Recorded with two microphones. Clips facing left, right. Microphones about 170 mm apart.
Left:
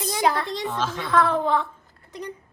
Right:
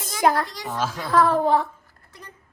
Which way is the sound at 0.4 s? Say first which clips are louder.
Left 7 dB; 20° left (ahead or behind).